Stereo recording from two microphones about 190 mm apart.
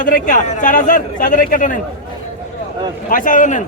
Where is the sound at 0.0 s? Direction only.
45° left (ahead or behind).